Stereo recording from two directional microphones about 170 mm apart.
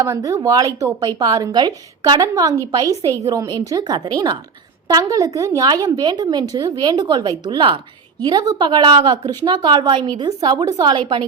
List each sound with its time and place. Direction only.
0.0 s a woman's voice: 20° right (ahead or behind)